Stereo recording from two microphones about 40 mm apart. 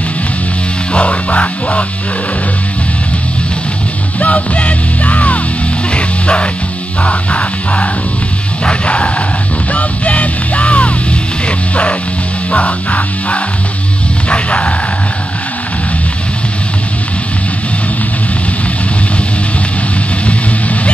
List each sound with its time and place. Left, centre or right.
0.9 s music: left
4.2 s music: left
5.9 s music: left
9.7 s music: left
20.2 s a sound: left